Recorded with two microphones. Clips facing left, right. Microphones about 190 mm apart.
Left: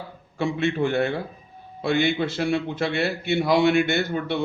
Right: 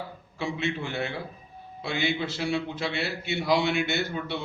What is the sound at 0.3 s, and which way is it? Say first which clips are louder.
A man's voice: left 7 dB; 55° left (ahead or behind).